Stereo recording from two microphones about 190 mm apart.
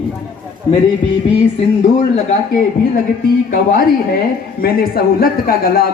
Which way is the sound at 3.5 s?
50° left (ahead or behind).